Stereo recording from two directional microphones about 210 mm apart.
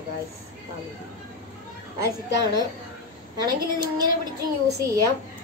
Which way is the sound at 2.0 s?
20° right (ahead or behind).